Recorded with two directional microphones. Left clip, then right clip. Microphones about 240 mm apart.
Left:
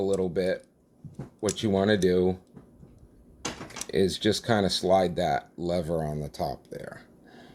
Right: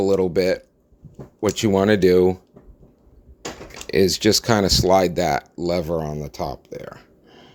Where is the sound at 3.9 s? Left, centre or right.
Right.